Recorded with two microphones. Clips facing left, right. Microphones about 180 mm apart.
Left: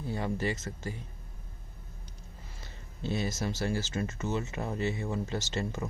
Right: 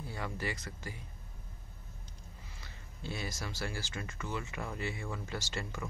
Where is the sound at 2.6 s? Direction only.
25° left (ahead or behind).